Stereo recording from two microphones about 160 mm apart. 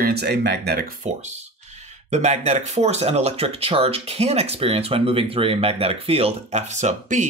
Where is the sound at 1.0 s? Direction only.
45° right (ahead or behind).